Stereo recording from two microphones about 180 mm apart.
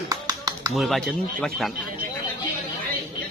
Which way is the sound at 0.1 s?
20° right (ahead or behind).